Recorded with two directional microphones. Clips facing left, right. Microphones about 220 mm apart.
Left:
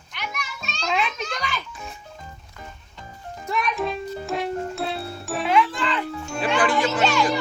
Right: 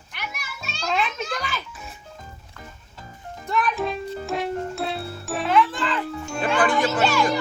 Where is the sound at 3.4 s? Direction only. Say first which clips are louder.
Right 1 dB; centre (ahead or behind).